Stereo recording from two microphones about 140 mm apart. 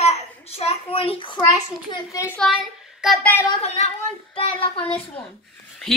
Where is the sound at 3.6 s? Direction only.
50° left (ahead or behind).